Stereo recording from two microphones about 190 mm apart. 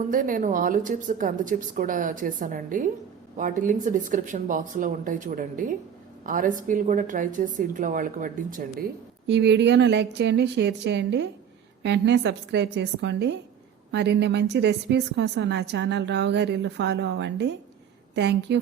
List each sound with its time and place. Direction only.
0.1 s speech: 45° right (ahead or behind)
9.2 s a woman's voice: 65° right (ahead or behind)